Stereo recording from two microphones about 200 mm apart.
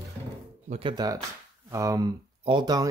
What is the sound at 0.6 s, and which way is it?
Speech, 25° right (ahead or behind).